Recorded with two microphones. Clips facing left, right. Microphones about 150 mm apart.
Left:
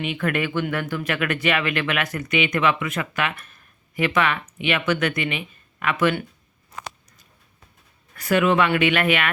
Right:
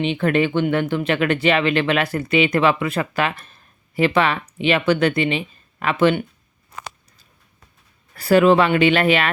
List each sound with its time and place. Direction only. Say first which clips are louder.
0.0 s speech: right 6 dB; 30° right (ahead or behind)
8.1 s speech: right 6 dB; 35° right (ahead or behind)